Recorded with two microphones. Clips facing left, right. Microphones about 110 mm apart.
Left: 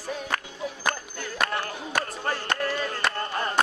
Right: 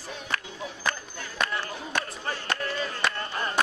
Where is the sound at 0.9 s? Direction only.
50° left (ahead or behind).